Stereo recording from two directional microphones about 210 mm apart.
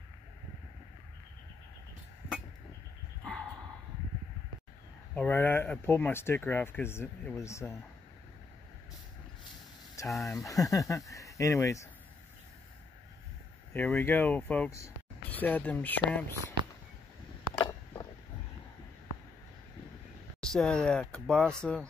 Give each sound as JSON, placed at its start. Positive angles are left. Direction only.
{"t": 5.1, "sound": "speech", "side_deg": 10}
{"t": 10.0, "sound": "speech", "side_deg": 0}
{"t": 10.4, "sound": "speech", "side_deg": 15}
{"t": 13.7, "sound": "speech", "side_deg": 10}
{"t": 17.6, "sound": "a sound", "side_deg": 15}
{"t": 20.3, "sound": "speech", "side_deg": 5}